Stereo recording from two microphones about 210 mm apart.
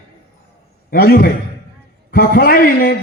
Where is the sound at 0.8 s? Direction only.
45° left (ahead or behind).